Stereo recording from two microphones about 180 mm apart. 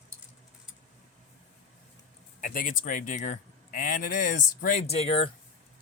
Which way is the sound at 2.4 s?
50° left (ahead or behind).